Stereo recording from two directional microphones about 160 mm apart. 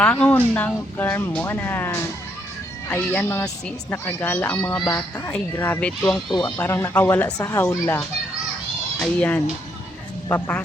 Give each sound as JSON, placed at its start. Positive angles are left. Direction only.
{"t": 0.0, "sound": "speech", "side_deg": 10}
{"t": 6.6, "sound": "speech", "side_deg": 15}